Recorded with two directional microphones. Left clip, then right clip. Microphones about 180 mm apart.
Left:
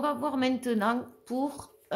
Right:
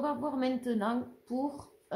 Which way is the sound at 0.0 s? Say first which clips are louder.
Left 4 dB; 35° left (ahead or behind).